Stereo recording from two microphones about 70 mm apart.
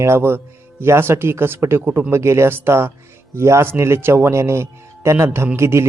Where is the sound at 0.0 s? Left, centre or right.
Right.